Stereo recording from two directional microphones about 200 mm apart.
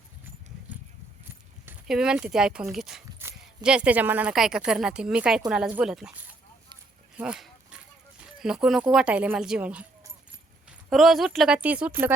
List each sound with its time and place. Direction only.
1.6 s speech: 5° right (ahead or behind)
7.2 s a sound: 5° right (ahead or behind)
8.4 s speech: centre (ahead or behind)